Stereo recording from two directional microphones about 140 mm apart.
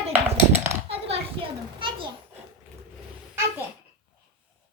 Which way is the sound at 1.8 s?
35° right (ahead or behind).